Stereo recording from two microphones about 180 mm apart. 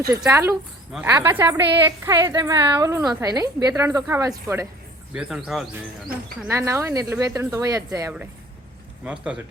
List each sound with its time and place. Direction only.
0.3 s a woman's voice: 15° right (ahead or behind)
5.1 s speech: centre (ahead or behind)
6.5 s a woman's voice: 15° right (ahead or behind)
9.0 s speech: 5° right (ahead or behind)